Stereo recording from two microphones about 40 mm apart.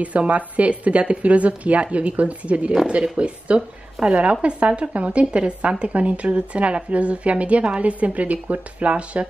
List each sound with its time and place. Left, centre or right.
0.0 s speech: right